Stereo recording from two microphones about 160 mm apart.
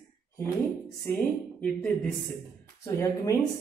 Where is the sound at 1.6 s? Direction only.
10° left (ahead or behind).